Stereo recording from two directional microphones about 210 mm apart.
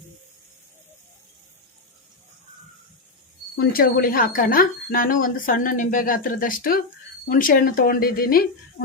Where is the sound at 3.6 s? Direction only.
45° left (ahead or behind).